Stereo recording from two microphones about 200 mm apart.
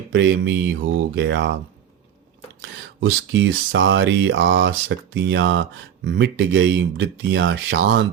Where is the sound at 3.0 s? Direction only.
70° right (ahead or behind).